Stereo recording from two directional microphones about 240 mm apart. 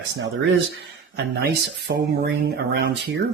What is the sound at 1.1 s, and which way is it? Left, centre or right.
Speech, right.